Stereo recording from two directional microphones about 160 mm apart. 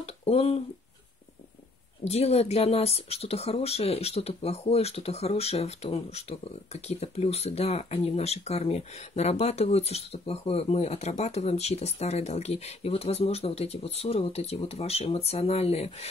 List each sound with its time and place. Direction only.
0.0 s speech: 40° left (ahead or behind)
2.0 s speech: 40° left (ahead or behind)